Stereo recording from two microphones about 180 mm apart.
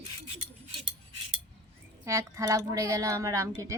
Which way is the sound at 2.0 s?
15° right (ahead or behind).